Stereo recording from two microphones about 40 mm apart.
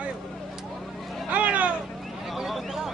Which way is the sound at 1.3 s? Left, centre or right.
Right.